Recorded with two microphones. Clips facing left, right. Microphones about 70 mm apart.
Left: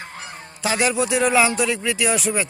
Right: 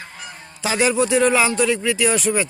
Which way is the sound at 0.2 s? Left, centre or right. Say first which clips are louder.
Left 1 dB; left.